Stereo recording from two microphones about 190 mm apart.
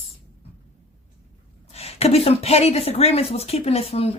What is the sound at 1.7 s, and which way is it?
Speech, 35° left (ahead or behind).